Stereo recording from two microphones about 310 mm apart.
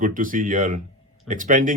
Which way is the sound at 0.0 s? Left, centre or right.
Right.